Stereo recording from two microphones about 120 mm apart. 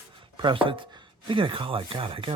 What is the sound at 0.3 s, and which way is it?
Speech, 45° right (ahead or behind).